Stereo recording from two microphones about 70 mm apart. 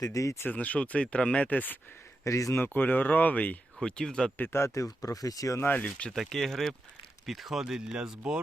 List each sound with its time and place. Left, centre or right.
0.0 s speech: left
0.4 s speech: centre
2.2 s speech: left
2.6 s speech: left
3.8 s speech: centre
4.4 s speech: left
5.5 s speech: left
6.1 s speech: centre